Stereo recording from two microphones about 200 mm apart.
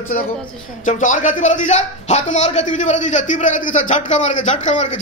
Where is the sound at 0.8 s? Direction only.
40° left (ahead or behind).